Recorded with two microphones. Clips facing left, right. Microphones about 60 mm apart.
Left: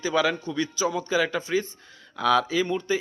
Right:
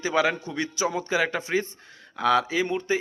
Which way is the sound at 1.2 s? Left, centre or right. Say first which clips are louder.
Even; right.